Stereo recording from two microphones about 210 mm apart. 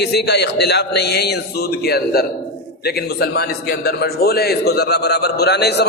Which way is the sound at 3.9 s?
50° left (ahead or behind).